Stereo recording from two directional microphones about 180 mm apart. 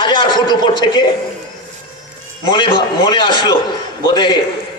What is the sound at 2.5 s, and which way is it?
A man's voice, 25° left (ahead or behind).